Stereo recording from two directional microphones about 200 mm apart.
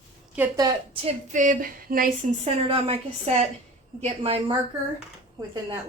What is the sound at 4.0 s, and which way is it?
Speech, 30° right (ahead or behind).